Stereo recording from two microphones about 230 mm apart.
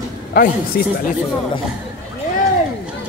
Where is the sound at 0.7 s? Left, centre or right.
Left.